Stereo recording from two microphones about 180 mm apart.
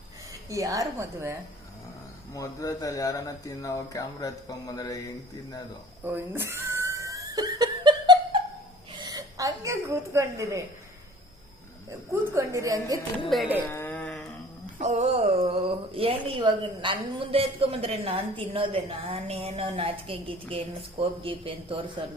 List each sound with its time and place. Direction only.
0.5 s a woman's voice: 20° right (ahead or behind)
2.3 s speech: 20° left (ahead or behind)
6.1 s laughter: 10° right (ahead or behind)
9.0 s a sound: 20° right (ahead or behind)
12.2 s a woman's voice: 15° right (ahead or behind)
13.3 s speech: centre (ahead or behind)
13.6 s a sound: 10° left (ahead or behind)
14.8 s a man's voice: 40° right (ahead or behind)